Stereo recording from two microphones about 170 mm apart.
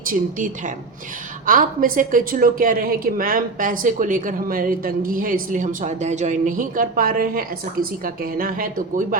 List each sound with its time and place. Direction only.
0.1 s a woman's voice: 50° right (ahead or behind)